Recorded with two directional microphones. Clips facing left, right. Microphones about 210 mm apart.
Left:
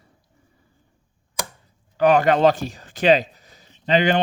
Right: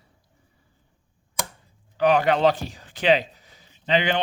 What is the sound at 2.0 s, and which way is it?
Speech, 45° left (ahead or behind).